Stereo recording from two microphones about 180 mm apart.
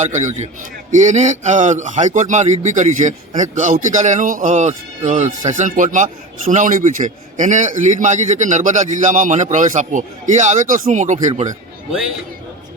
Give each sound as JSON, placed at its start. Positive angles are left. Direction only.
{"t": 0.0, "sound": "a man's voice", "side_deg": -40}